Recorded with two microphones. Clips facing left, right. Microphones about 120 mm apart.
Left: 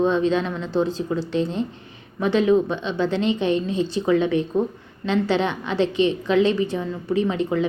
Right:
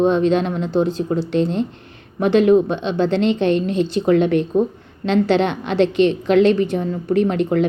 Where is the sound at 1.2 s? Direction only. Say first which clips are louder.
Right 5 dB; 70° right (ahead or behind).